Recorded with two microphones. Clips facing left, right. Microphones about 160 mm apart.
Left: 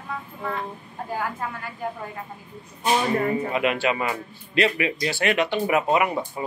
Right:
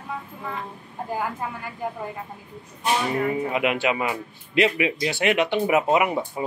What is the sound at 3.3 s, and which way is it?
Speech, 15° right (ahead or behind).